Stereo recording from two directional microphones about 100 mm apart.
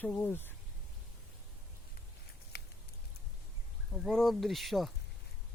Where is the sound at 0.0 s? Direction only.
20° left (ahead or behind).